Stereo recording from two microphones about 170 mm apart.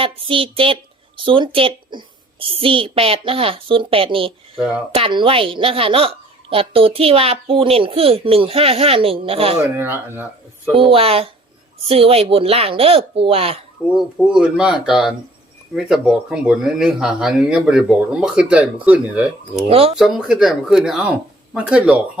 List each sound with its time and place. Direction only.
0.0 s a woman's voice: 30° right (ahead or behind)
4.5 s speech: 5° right (ahead or behind)
4.9 s a woman's voice: 30° right (ahead or behind)
9.7 s speech: 15° right (ahead or behind)
10.9 s a woman's voice: 35° right (ahead or behind)
13.9 s speech: 5° right (ahead or behind)
19.6 s a woman's voice: 35° right (ahead or behind)
20.0 s speech: 5° right (ahead or behind)